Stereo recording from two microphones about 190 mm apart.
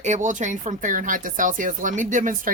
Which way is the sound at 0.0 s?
40° right (ahead or behind).